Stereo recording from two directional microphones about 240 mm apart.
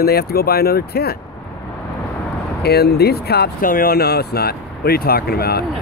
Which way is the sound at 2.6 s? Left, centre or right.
Left.